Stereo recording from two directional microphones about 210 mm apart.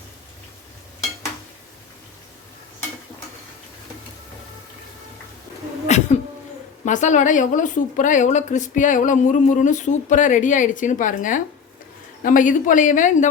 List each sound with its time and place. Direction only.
5.9 s cough: 30° left (ahead or behind)
6.8 s a woman's voice: 35° left (ahead or behind)